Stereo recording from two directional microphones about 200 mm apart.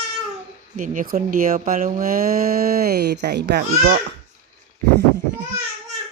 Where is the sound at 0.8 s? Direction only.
40° right (ahead or behind).